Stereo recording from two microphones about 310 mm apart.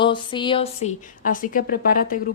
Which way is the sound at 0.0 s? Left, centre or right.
Centre.